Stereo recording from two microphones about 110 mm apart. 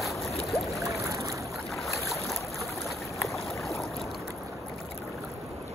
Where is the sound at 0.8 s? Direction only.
30° right (ahead or behind).